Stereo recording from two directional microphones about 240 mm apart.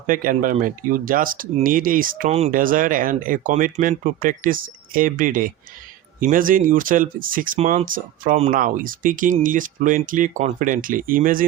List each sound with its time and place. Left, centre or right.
0.1 s speech: right